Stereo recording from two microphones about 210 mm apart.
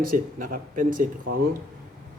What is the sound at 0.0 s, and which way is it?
A man's voice, 45° right (ahead or behind).